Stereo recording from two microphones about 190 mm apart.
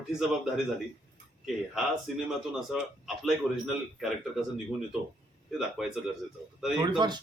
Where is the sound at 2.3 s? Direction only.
Centre (ahead or behind).